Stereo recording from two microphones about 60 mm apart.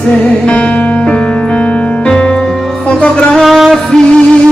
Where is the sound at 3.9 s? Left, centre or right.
Centre.